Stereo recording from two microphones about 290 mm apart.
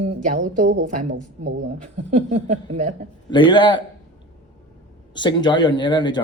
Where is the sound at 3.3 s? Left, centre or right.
Centre.